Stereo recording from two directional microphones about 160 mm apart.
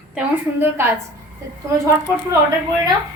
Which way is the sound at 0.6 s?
15° right (ahead or behind).